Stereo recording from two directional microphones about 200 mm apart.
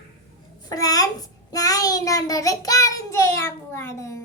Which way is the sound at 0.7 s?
20° left (ahead or behind).